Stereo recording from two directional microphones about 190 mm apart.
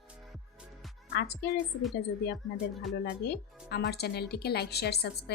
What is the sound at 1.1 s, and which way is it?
Speech, 60° left (ahead or behind).